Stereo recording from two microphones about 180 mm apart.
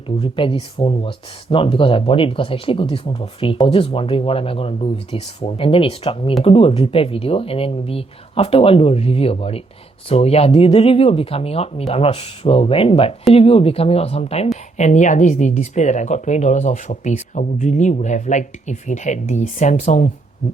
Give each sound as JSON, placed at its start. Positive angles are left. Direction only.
{"t": 0.2, "sound": "speech", "side_deg": 30}